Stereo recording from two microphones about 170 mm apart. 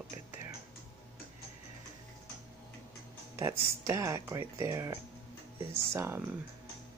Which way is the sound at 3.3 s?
15° right (ahead or behind).